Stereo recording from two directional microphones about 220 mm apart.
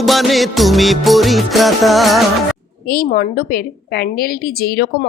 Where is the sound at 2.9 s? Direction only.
40° left (ahead or behind).